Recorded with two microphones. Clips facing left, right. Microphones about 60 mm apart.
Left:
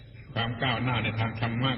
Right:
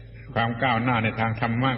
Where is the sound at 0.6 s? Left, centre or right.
Right.